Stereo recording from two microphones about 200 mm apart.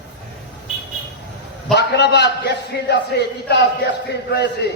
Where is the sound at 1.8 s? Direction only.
55° left (ahead or behind).